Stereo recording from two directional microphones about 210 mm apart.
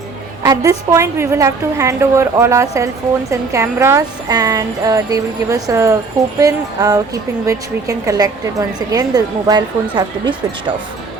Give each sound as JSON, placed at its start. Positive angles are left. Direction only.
{"t": 0.4, "sound": "a woman's voice", "side_deg": -15}